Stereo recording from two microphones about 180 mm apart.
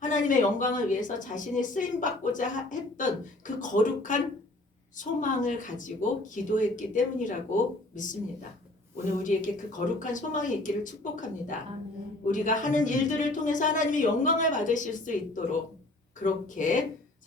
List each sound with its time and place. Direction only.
0.0 s a woman's voice: 45° left (ahead or behind)
9.2 s a woman's voice: 45° left (ahead or behind)